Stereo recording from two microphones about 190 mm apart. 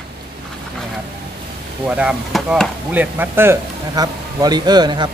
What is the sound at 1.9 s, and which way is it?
Speech, 5° right (ahead or behind).